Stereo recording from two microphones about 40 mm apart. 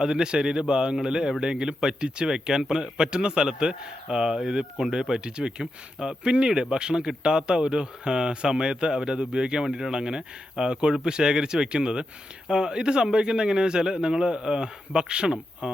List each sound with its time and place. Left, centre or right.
0.0 s speech: centre
9.6 s speech: centre